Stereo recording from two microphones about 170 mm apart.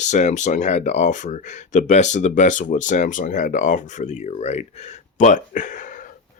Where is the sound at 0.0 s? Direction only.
45° left (ahead or behind).